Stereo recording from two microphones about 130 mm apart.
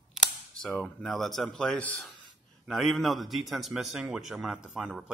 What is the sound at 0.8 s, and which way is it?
A man's voice, centre (ahead or behind).